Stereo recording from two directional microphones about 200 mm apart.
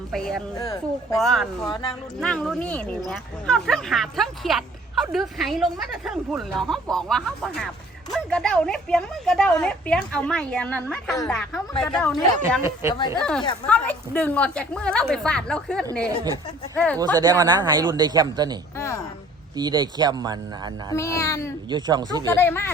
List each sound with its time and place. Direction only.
0.1 s speech: centre (ahead or behind)
1.6 s speech: 20° left (ahead or behind)
2.2 s speech: 5° left (ahead or behind)
12.4 s speech: 15° right (ahead or behind)
13.1 s speech: 5° left (ahead or behind)
16.0 s speech: 15° right (ahead or behind)
16.7 s a child's voice: 5° left (ahead or behind)
17.0 s speech: 20° right (ahead or behind)
18.8 s a child's voice: 15° left (ahead or behind)
19.5 s speech: 20° right (ahead or behind)
20.9 s a child's voice: 15° left (ahead or behind)
21.7 s speech: 20° right (ahead or behind)
22.3 s a child's voice: 10° left (ahead or behind)